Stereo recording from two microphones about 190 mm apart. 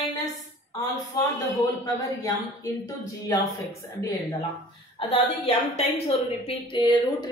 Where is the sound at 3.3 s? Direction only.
15° left (ahead or behind).